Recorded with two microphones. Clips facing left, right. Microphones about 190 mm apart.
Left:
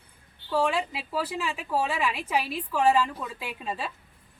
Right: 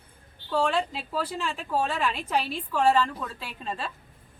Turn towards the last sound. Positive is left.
turn(degrees=10)  # may be behind; listen again after turning